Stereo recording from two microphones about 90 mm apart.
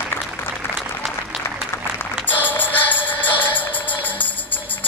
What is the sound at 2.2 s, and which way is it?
Music, 20° left (ahead or behind).